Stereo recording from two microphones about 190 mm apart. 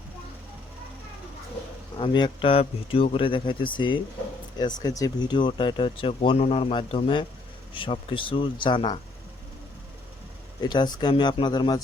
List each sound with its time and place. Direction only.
2.0 s speech: 25° left (ahead or behind)
10.6 s speech: 25° left (ahead or behind)